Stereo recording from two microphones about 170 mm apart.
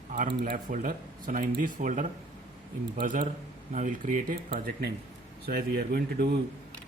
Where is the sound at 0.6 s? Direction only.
50° right (ahead or behind).